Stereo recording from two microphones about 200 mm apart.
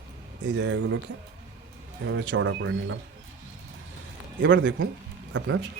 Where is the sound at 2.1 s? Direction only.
70° right (ahead or behind).